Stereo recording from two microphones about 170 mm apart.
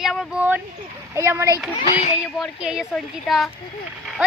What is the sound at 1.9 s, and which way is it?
Speech, 35° left (ahead or behind).